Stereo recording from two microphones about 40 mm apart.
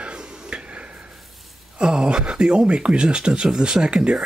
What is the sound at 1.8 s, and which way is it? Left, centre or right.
Speech, right.